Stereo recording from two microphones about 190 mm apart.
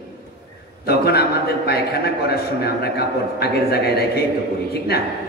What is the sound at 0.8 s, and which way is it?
A man's voice, 55° left (ahead or behind).